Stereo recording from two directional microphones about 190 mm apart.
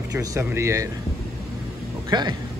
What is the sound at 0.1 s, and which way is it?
Speech, 15° right (ahead or behind).